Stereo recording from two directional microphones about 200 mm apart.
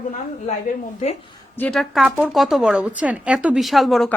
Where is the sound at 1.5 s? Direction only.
5° left (ahead or behind).